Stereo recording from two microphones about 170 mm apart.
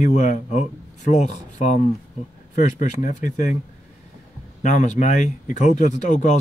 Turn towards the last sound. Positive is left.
turn(degrees=45)  # may be behind; listen again after turning